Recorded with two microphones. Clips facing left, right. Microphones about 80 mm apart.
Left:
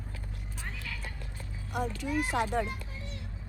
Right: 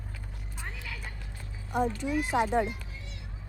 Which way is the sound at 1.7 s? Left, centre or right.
Right.